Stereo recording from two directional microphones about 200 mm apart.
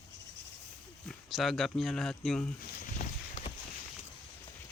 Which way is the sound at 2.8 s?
40° left (ahead or behind).